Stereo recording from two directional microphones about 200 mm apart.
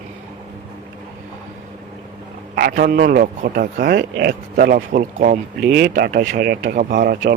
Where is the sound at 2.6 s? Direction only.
50° right (ahead or behind).